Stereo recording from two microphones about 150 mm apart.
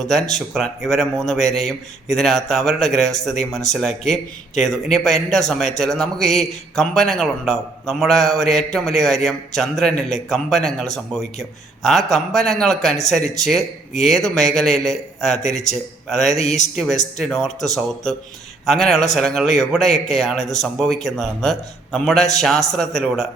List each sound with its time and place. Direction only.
0.0 s a man's voice: centre (ahead or behind)
14.0 s a man's voice: centre (ahead or behind)
15.4 s speech: 50° left (ahead or behind)
16.0 s a man's voice: centre (ahead or behind)
16.4 s speech: 50° left (ahead or behind)
16.7 s a man's voice: 5° left (ahead or behind)